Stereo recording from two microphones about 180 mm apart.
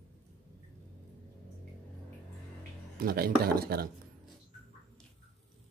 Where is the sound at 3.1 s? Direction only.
55° right (ahead or behind).